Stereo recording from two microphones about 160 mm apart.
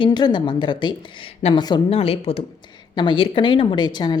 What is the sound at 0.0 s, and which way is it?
A woman's voice, 25° left (ahead or behind).